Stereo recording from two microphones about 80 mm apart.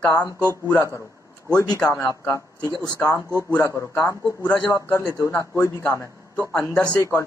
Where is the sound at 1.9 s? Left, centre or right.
Left.